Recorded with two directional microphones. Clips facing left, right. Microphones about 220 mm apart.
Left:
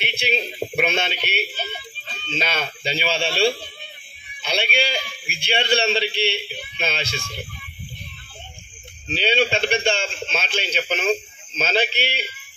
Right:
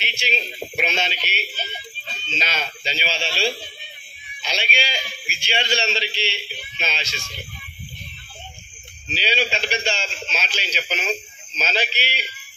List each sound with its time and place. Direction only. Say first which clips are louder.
0.0 s a man's voice: left 4 dB; 55° left (ahead or behind)
9.0 s a man's voice: left 5 dB; 55° left (ahead or behind)